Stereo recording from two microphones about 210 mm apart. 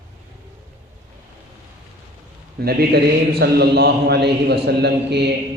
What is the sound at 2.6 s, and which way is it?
A man's voice, 50° right (ahead or behind).